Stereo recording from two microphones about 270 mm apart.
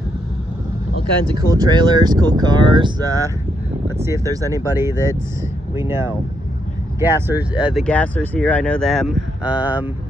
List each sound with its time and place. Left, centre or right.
1.5 s speech: centre